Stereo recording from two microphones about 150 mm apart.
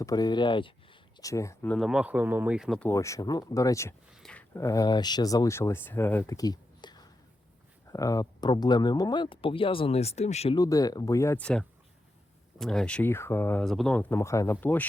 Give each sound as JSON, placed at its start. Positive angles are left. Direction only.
{"t": 0.0, "sound": "speech", "side_deg": 25}
{"t": 1.2, "sound": "speech", "side_deg": 20}
{"t": 1.7, "sound": "speech", "side_deg": 0}
{"t": 2.9, "sound": "speech", "side_deg": 20}
{"t": 4.1, "sound": "speech", "side_deg": 5}
{"t": 4.5, "sound": "speech", "side_deg": 20}
{"t": 10.5, "sound": "speech", "side_deg": 25}
{"t": 11.3, "sound": "speech", "side_deg": 5}
{"t": 13.7, "sound": "speech", "side_deg": 5}